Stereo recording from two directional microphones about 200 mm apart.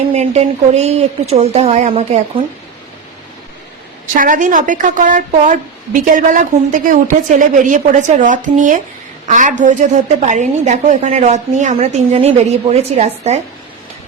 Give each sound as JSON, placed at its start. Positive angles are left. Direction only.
{"t": 0.1, "sound": "a woman's voice", "side_deg": -35}
{"t": 4.1, "sound": "a woman's voice", "side_deg": -40}